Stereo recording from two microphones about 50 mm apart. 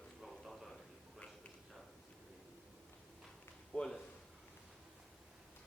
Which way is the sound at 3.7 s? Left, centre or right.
Centre.